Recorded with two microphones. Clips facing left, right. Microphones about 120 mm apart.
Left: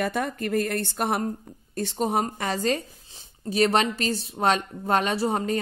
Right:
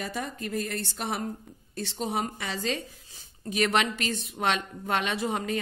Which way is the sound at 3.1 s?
30° left (ahead or behind).